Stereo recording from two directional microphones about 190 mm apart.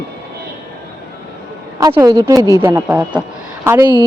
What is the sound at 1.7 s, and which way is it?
A woman's voice, 20° right (ahead or behind).